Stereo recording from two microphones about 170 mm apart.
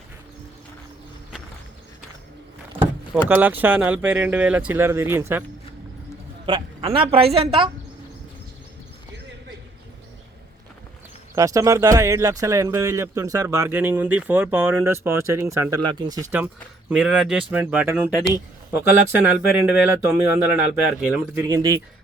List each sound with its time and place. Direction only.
3.1 s speech: 10° right (ahead or behind)
6.4 s a woman's voice: 30° right (ahead or behind)
11.3 s speech: 20° right (ahead or behind)
16.9 s speech: 5° right (ahead or behind)
21.4 s speech: 20° right (ahead or behind)